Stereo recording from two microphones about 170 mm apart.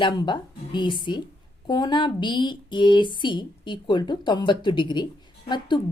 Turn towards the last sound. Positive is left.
turn(degrees=25)  # may be behind; listen again after turning